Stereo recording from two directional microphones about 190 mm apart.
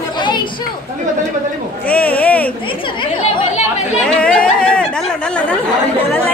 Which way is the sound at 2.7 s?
25° left (ahead or behind).